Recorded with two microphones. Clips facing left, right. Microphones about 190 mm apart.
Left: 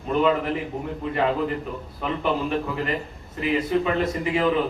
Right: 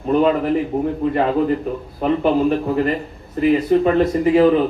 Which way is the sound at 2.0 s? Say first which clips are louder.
Right 9 dB; 45° right (ahead or behind).